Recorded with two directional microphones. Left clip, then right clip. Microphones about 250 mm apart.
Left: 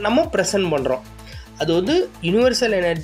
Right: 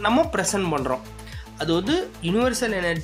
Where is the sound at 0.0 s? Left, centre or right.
Centre.